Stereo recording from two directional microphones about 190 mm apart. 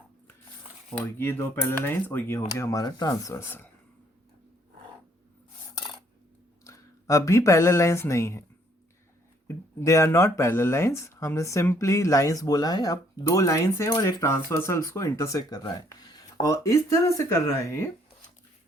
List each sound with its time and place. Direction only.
0.9 s speech: 10° left (ahead or behind)
6.7 s speech: 15° left (ahead or behind)
9.5 s speech: 15° left (ahead or behind)